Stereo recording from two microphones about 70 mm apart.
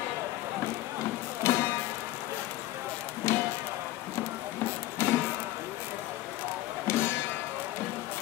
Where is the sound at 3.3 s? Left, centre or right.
Left.